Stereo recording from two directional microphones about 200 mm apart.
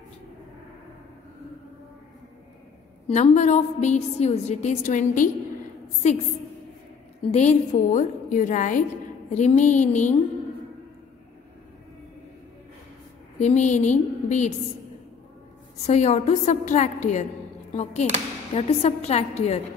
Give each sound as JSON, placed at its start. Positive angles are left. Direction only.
{"t": 3.1, "sound": "a woman's voice", "side_deg": 35}
{"t": 7.2, "sound": "a woman's voice", "side_deg": 35}
{"t": 13.4, "sound": "a woman's voice", "side_deg": 35}
{"t": 15.8, "sound": "a woman's voice", "side_deg": 35}
{"t": 18.5, "sound": "a woman's voice", "side_deg": 30}